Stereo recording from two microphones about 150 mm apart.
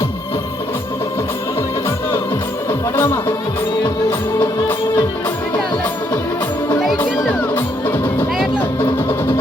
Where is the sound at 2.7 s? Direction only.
15° left (ahead or behind).